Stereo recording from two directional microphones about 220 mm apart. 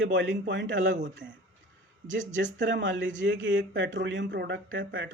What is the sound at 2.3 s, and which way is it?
Speech, 55° right (ahead or behind).